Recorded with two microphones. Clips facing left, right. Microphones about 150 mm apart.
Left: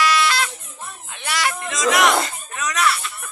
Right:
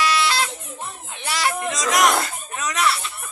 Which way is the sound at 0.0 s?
30° right (ahead or behind).